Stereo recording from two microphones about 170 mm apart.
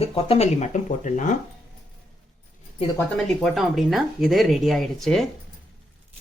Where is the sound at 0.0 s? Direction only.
35° left (ahead or behind).